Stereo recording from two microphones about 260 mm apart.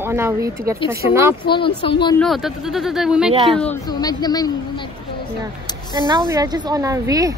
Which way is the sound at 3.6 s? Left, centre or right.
Centre.